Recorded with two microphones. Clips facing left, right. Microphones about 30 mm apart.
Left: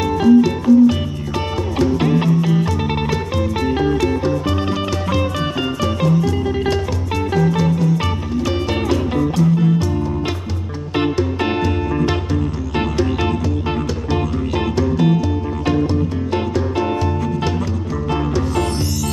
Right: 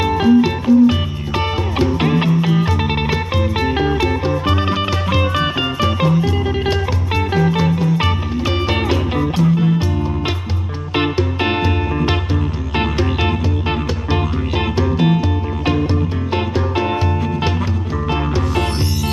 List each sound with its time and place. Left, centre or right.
0.0 s music: right
11.0 s music: right
18.1 s music: right